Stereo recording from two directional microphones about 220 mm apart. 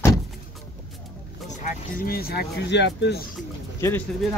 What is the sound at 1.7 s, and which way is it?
Speech, 40° left (ahead or behind).